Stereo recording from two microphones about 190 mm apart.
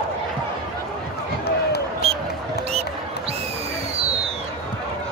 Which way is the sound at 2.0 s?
30° right (ahead or behind).